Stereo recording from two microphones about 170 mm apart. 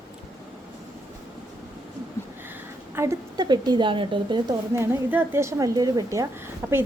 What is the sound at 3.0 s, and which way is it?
A woman's voice, 20° right (ahead or behind).